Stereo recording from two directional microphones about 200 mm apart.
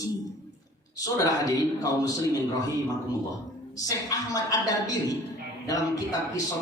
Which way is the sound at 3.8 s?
20° left (ahead or behind).